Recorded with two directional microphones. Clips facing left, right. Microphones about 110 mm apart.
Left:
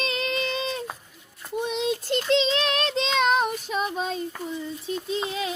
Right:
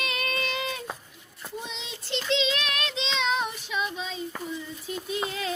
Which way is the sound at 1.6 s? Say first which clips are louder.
Left 15 dB; 55° left (ahead or behind).